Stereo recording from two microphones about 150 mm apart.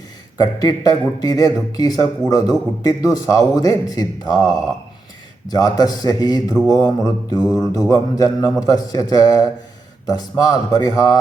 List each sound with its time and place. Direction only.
0.3 s speech: 25° left (ahead or behind)